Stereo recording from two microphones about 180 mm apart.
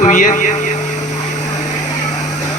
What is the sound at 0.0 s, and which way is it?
Speech, 45° left (ahead or behind).